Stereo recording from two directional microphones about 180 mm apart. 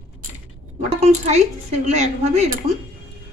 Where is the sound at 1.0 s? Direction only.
40° right (ahead or behind).